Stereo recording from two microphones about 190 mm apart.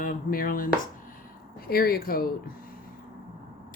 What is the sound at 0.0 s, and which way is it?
Speech, 45° left (ahead or behind).